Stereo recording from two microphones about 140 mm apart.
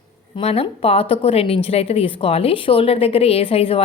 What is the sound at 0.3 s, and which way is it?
A woman's voice, 45° left (ahead or behind).